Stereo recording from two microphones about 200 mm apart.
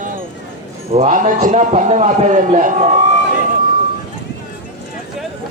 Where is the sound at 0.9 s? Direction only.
35° right (ahead or behind).